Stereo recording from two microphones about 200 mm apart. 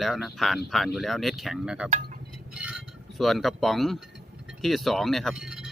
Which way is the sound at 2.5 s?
5° right (ahead or behind).